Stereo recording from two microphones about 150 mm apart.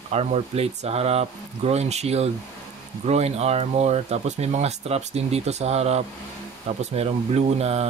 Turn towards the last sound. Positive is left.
turn(degrees=-45)  # may be behind; listen again after turning